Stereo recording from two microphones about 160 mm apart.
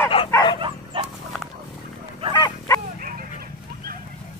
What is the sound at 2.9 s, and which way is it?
Dog, 60° right (ahead or behind).